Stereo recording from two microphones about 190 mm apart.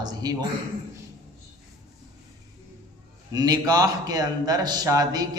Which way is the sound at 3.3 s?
20° right (ahead or behind).